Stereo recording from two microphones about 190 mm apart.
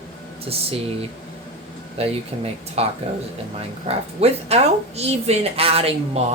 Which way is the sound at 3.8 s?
35° right (ahead or behind).